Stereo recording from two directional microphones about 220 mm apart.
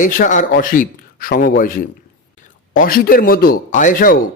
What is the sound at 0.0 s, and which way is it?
A man's voice, 35° left (ahead or behind).